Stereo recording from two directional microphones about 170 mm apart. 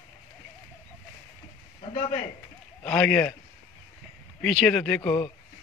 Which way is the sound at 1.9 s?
30° left (ahead or behind).